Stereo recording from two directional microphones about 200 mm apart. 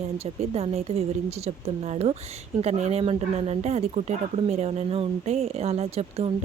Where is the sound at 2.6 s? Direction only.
35° right (ahead or behind).